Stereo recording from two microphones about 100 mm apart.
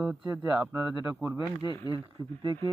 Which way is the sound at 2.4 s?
50° right (ahead or behind).